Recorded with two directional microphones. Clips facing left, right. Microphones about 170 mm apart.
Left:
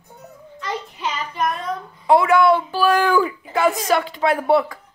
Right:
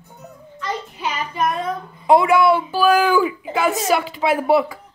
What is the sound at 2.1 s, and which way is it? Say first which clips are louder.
Speech: right 1 dB; 20° right (ahead or behind).